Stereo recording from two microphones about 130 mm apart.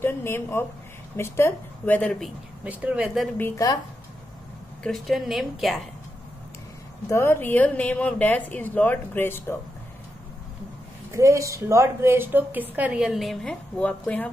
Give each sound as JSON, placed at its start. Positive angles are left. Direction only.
{"t": 0.0, "sound": "a woman's voice", "side_deg": 20}
{"t": 2.6, "sound": "a woman's voice", "side_deg": -10}
{"t": 3.3, "sound": "a woman's voice", "side_deg": 15}
{"t": 4.8, "sound": "a woman's voice", "side_deg": 0}
{"t": 7.1, "sound": "a woman's voice", "side_deg": 20}
{"t": 11.1, "sound": "a woman's voice", "side_deg": -25}